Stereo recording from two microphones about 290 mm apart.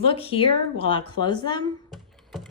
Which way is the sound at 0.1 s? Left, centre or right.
Centre.